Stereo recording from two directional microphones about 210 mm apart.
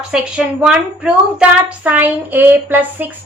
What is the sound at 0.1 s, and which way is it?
A woman's voice, 5° right (ahead or behind).